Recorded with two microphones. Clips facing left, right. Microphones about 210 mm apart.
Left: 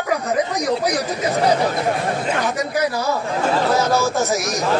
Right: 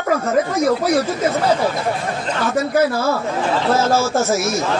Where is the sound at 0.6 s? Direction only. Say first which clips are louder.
Right 4 dB; 15° left (ahead or behind).